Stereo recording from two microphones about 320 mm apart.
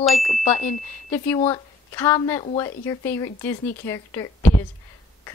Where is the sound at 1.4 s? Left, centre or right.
Centre.